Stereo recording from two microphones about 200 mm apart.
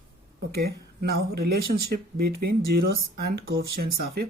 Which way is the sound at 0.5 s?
55° right (ahead or behind).